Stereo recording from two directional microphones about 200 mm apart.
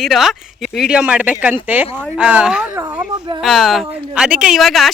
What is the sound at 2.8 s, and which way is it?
Speech, 15° right (ahead or behind).